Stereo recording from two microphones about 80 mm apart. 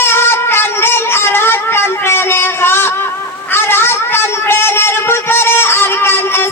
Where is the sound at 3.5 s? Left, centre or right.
Left.